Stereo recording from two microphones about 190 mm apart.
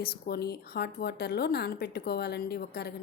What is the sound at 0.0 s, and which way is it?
A woman's voice, 55° left (ahead or behind).